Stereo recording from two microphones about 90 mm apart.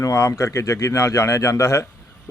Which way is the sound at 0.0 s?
35° left (ahead or behind).